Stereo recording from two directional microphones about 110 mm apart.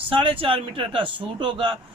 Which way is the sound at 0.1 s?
50° right (ahead or behind).